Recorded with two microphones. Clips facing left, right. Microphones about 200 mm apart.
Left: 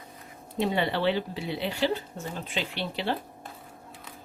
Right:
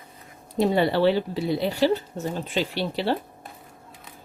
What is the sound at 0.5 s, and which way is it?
A woman's voice, 40° right (ahead or behind).